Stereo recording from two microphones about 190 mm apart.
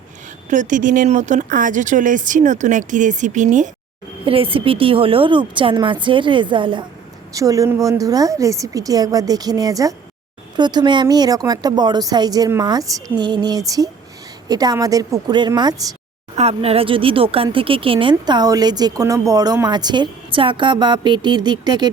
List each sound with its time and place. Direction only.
0.5 s speech: 40° right (ahead or behind)
4.3 s speech: 30° right (ahead or behind)
16.3 s speech: 35° right (ahead or behind)